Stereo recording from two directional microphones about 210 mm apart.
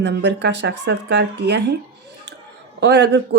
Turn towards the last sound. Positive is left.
turn(degrees=-55)  # may be behind; listen again after turning